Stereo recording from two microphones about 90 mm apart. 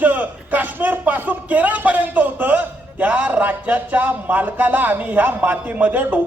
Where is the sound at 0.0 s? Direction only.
15° right (ahead or behind).